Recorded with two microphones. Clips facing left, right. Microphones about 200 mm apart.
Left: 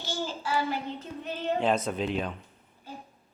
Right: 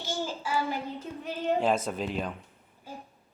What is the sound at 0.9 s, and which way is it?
A child's voice, 10° right (ahead or behind).